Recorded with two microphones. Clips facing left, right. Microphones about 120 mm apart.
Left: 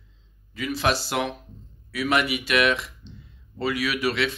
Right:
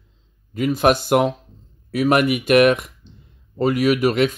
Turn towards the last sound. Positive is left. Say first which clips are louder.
# right 8 dB
turn(degrees=-45)  # may be behind; listen again after turning